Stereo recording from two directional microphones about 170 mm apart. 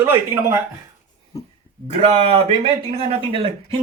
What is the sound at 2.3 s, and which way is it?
Speech, 35° right (ahead or behind).